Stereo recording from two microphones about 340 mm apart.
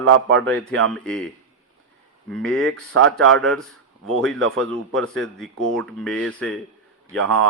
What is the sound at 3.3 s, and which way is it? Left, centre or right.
Speech, centre.